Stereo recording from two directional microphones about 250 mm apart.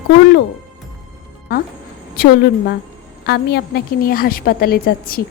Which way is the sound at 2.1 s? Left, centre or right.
Left.